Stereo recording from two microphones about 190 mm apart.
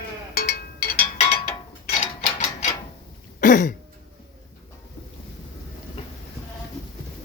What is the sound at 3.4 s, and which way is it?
Throat clearing, 45° left (ahead or behind).